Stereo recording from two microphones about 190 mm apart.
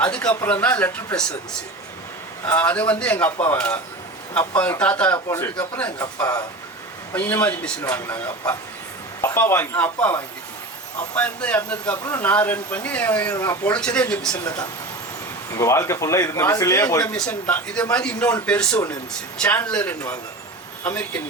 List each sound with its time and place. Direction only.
0.0 s a man's voice: 5° left (ahead or behind)
2.4 s a man's voice: 10° left (ahead or behind)
14.4 s a man's voice: 20° left (ahead or behind)